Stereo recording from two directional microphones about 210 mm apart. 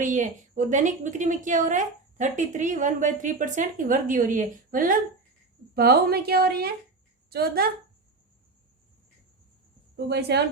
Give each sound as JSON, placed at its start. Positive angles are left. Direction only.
{"t": 0.0, "sound": "a woman's voice", "side_deg": -35}
{"t": 9.9, "sound": "a woman's voice", "side_deg": -50}